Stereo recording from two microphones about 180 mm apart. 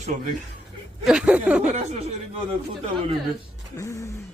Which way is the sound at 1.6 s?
35° right (ahead or behind).